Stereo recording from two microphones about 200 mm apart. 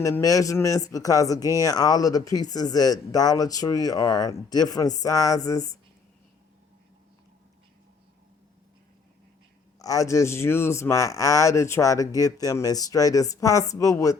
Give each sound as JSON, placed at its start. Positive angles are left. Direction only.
{"t": 0.0, "sound": "speech", "side_deg": 15}
{"t": 9.7, "sound": "speech", "side_deg": 15}